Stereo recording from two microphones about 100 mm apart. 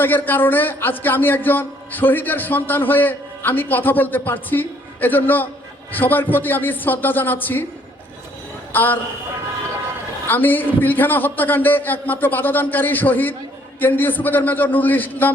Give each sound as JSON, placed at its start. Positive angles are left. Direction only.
{"t": 0.0, "sound": "a man's voice", "side_deg": 20}
{"t": 8.7, "sound": "a woman's voice", "side_deg": 20}
{"t": 10.2, "sound": "a man's voice", "side_deg": 20}